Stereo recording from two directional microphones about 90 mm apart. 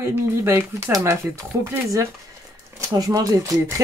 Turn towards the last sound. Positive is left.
turn(degrees=-35)  # may be behind; listen again after turning